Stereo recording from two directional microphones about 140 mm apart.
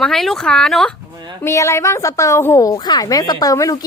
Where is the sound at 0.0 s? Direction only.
5° left (ahead or behind).